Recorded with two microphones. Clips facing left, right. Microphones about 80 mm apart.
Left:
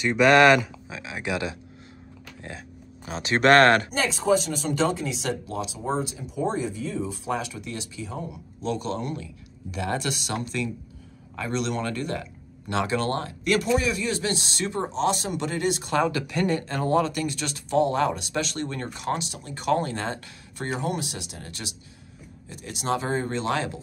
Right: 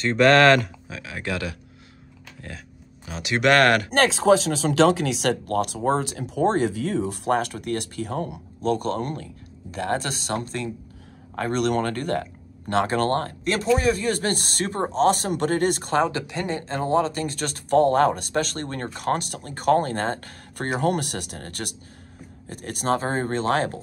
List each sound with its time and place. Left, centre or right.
0.0 s speech: centre
3.1 s speech: left
3.9 s speech: right
8.6 s speech: right
11.3 s speech: right
15.9 s speech: right